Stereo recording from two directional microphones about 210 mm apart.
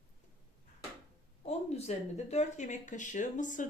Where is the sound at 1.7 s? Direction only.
30° left (ahead or behind).